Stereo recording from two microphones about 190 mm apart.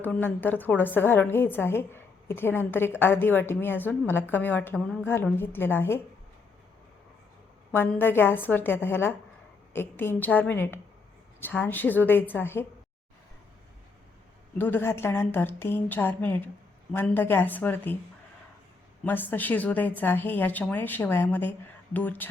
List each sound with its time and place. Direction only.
0.0 s a woman's voice: 10° left (ahead or behind)
7.7 s a woman's voice: 10° left (ahead or behind)
14.6 s a woman's voice: 10° left (ahead or behind)
19.0 s a woman's voice: 10° left (ahead or behind)